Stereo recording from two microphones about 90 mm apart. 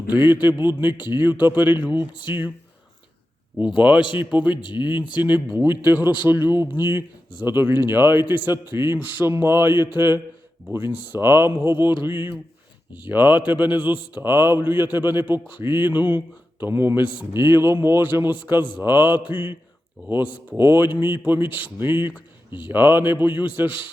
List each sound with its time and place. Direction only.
0.1 s speech: 20° right (ahead or behind)
4.2 s a man's voice: 15° right (ahead or behind)
4.5 s speech: 60° left (ahead or behind)
4.8 s a man's voice: 15° right (ahead or behind)